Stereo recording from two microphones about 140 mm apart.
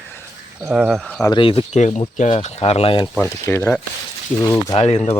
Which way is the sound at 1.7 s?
55° left (ahead or behind).